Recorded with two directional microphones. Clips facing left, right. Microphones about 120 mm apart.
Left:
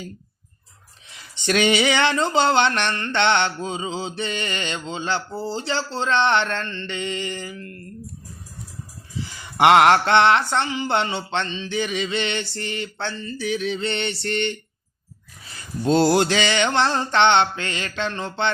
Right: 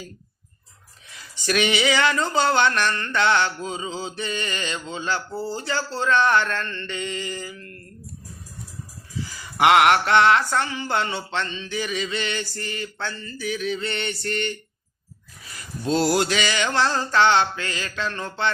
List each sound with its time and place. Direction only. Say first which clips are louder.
1.4 s male singing: left 3 dB; 25° left (ahead or behind)
9.2 s male singing: left 2 dB; 25° left (ahead or behind)